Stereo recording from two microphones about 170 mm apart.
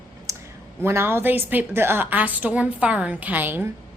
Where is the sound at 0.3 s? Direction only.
20° right (ahead or behind).